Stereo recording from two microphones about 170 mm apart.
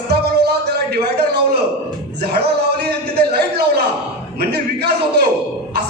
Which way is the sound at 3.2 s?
70° right (ahead or behind).